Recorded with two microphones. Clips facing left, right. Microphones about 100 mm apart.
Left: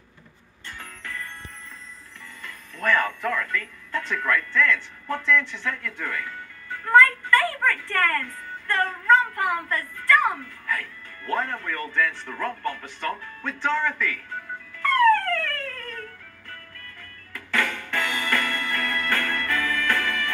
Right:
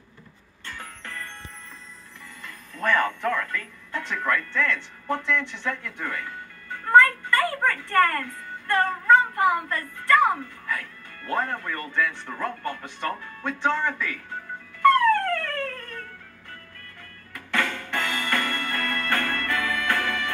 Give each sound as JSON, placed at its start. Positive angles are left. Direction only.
{"t": 2.8, "sound": "a man's voice", "side_deg": -20}
{"t": 15.0, "sound": "music", "side_deg": -15}
{"t": 17.6, "sound": "music", "side_deg": -20}